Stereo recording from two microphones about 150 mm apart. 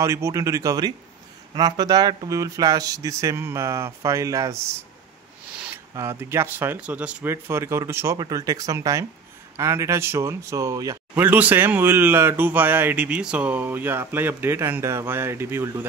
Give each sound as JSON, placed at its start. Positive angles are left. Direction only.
{"t": 0.0, "sound": "speech", "side_deg": -20}
{"t": 11.2, "sound": "speech", "side_deg": -10}